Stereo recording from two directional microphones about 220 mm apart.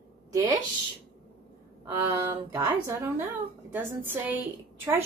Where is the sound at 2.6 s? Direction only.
10° right (ahead or behind).